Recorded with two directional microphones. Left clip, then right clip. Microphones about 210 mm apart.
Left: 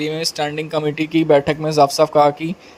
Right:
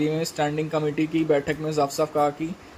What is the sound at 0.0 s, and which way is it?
Speech, 40° left (ahead or behind).